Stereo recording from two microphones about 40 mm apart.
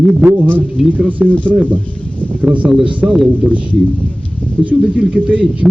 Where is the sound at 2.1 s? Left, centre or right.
Left.